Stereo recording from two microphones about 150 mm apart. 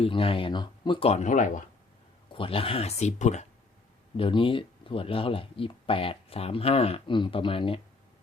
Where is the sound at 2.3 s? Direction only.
35° left (ahead or behind).